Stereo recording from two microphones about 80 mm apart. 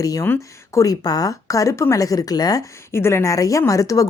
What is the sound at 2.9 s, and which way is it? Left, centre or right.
Speech, left.